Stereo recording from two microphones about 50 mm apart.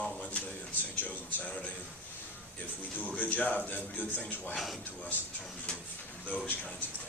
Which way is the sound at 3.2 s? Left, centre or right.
Left.